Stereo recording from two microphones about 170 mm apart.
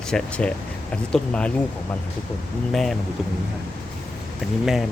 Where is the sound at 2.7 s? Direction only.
Centre (ahead or behind).